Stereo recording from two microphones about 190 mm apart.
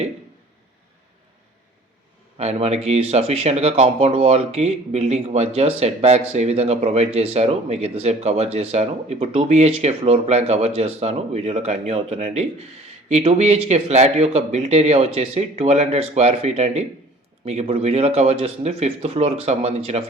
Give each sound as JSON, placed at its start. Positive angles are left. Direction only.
{"t": 2.4, "sound": "speech", "side_deg": -35}